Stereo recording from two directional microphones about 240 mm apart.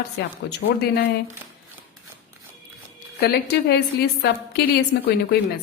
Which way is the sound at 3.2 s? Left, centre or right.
Left.